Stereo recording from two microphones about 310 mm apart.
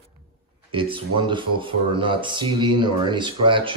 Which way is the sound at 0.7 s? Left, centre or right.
Centre.